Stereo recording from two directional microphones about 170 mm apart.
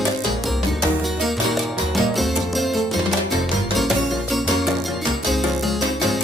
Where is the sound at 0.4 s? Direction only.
Centre (ahead or behind).